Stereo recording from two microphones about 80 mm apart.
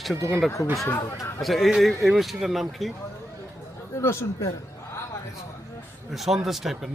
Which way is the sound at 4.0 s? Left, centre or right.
Left.